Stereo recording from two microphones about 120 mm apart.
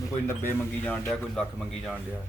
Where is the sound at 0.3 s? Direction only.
20° left (ahead or behind).